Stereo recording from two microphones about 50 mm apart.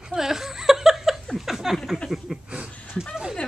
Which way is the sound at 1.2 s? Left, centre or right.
Centre.